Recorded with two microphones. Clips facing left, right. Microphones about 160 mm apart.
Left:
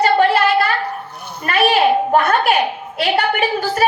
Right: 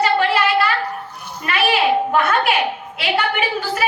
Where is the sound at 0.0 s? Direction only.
45° left (ahead or behind).